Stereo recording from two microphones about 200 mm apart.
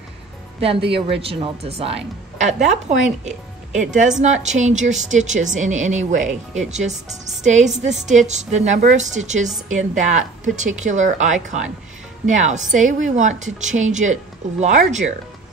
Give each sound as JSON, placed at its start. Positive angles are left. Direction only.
{"t": 0.8, "sound": "a woman's voice", "side_deg": -25}